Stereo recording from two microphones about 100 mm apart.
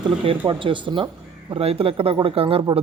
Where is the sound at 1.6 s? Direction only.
80° right.